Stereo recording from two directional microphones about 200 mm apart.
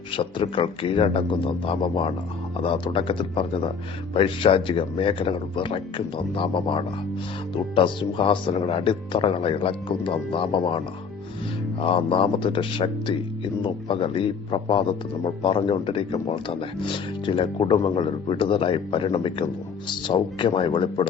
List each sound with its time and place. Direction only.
0.1 s speech: 25° left (ahead or behind)